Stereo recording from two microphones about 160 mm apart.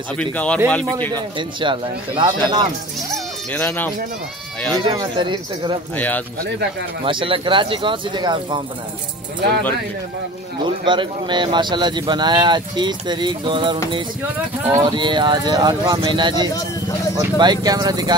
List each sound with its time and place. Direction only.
0.2 s speech: 5° left (ahead or behind)
1.1 s speech: 30° right (ahead or behind)
3.5 s speech: 10° left (ahead or behind)
4.7 s speech: 30° right (ahead or behind)
5.9 s speech: 10° left (ahead or behind)
7.1 s speech: 35° right (ahead or behind)
10.6 s speech: 30° right (ahead or behind)